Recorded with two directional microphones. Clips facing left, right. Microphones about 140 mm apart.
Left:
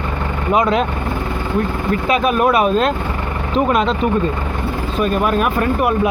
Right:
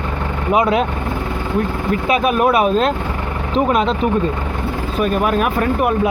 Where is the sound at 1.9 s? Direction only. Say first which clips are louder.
Even; 5° right (ahead or behind).